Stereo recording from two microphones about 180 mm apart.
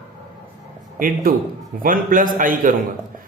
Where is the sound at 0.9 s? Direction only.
50° right (ahead or behind).